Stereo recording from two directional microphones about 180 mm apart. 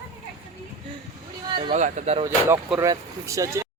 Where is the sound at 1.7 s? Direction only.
40° right (ahead or behind).